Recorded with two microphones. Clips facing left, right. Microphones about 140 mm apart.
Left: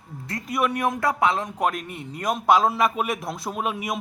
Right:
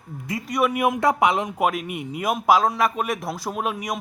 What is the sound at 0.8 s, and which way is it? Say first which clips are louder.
Speech: right 4 dB; 15° right (ahead or behind).